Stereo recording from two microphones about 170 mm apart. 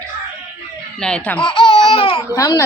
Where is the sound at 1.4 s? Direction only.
30° left (ahead or behind).